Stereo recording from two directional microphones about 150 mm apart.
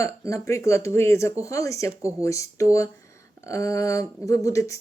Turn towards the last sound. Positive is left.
turn(degrees=20)  # may be behind; listen again after turning